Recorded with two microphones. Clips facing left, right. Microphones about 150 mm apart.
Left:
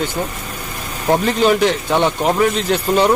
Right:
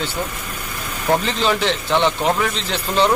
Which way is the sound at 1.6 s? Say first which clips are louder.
Left 2 dB; 10° left (ahead or behind).